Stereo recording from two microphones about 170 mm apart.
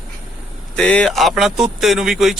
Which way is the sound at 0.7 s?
5° left (ahead or behind).